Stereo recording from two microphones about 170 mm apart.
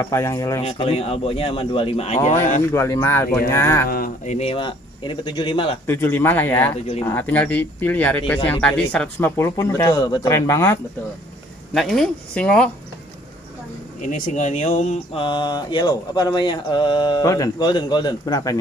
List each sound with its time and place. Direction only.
0.0 s speech: 15° left (ahead or behind)
0.6 s speech: 35° left (ahead or behind)
2.7 s speech: 15° left (ahead or behind)
3.9 s speech: 60° left (ahead or behind)
4.3 s speech: 35° left (ahead or behind)
5.9 s speech: 15° left (ahead or behind)
11.7 s speech: centre (ahead or behind)
14.0 s speech: 50° left (ahead or behind)
15.1 s mantra: 30° left (ahead or behind)